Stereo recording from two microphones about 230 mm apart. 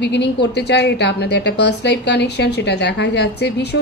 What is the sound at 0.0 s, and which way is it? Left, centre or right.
A woman's voice, left.